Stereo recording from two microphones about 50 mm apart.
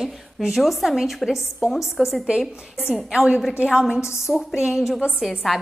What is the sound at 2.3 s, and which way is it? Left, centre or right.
A woman's voice, centre.